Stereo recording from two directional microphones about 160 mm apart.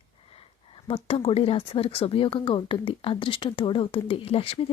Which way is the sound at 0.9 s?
35° left (ahead or behind).